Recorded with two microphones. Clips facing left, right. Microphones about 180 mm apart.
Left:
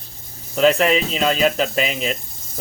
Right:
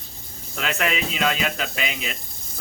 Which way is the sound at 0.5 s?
35° left (ahead or behind).